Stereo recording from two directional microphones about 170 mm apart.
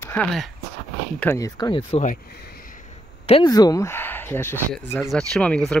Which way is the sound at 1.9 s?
45° left (ahead or behind).